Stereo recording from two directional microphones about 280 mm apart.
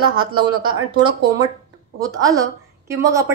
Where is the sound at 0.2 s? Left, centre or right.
Centre.